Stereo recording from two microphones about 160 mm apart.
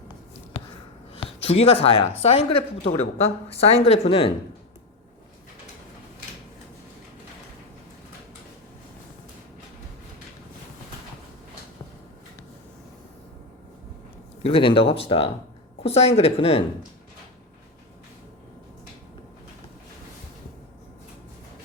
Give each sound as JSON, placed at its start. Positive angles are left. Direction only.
{"t": 1.1, "sound": "a woman's voice", "side_deg": 40}
{"t": 14.4, "sound": "a woman's voice", "side_deg": 35}